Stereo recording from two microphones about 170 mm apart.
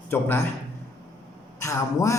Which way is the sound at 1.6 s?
20° left (ahead or behind).